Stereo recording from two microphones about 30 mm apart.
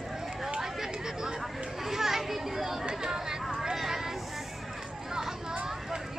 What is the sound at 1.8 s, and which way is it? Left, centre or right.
Children playing, centre.